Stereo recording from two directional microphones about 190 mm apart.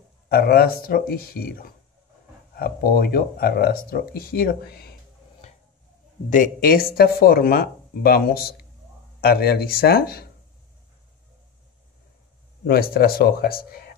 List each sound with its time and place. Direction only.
0.3 s speech: 55° left (ahead or behind)
6.3 s speech: 50° left (ahead or behind)
12.6 s speech: 50° left (ahead or behind)